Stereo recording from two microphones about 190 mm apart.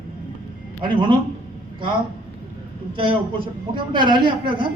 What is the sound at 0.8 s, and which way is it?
Speech, 25° right (ahead or behind).